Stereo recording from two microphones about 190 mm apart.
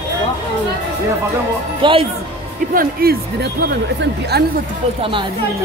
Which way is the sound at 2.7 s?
50° right (ahead or behind).